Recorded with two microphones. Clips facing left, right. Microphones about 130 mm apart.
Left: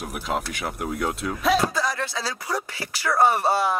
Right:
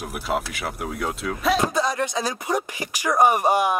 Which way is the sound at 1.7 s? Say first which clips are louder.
Right 4 dB; 20° right (ahead or behind).